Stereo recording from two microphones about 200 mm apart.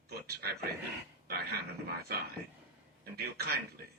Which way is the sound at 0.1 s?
50° right (ahead or behind).